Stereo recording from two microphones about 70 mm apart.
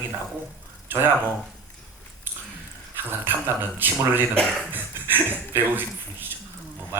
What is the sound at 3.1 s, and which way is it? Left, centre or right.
A man's voice, right.